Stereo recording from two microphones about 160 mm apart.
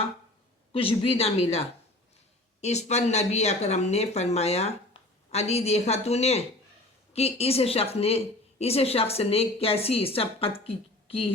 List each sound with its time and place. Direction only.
0.7 s a woman's voice: 35° left (ahead or behind)